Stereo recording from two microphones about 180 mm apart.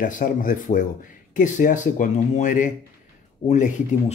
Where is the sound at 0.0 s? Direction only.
50° left (ahead or behind).